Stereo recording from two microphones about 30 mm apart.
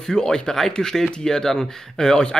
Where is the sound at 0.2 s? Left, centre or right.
Left.